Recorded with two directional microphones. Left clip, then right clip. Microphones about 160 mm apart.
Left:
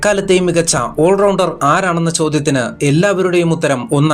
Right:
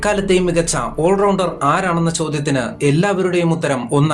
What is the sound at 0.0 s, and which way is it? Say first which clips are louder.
Speech: left 3 dB; 35° left (ahead or behind).